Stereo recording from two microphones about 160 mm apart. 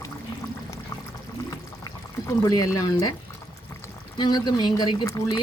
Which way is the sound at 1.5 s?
25° left (ahead or behind).